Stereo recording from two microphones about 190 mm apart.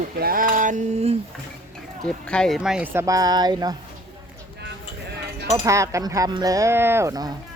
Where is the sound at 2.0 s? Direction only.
5° left (ahead or behind); by 3.7 s 20° right (ahead or behind).